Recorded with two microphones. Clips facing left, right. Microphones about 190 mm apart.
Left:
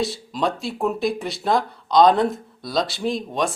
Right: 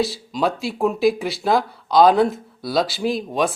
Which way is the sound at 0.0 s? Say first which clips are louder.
Right 2 dB; centre (ahead or behind).